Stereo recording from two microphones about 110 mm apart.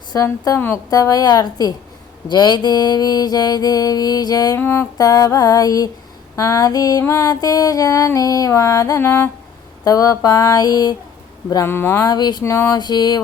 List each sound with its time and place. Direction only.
0.1 s speech: 30° left (ahead or behind)
0.9 s music: 35° left (ahead or behind)
4.5 s music: 20° left (ahead or behind)
9.8 s music: 35° left (ahead or behind)
11.4 s speech: 25° left (ahead or behind)
12.0 s music: 40° left (ahead or behind)
12.4 s speech: 25° left (ahead or behind)
12.7 s music: 40° left (ahead or behind)